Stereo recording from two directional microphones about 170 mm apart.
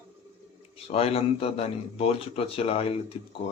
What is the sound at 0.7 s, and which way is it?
A man's voice, 35° left (ahead or behind).